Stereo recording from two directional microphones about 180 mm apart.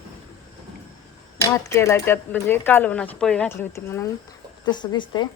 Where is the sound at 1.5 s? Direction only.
15° left (ahead or behind).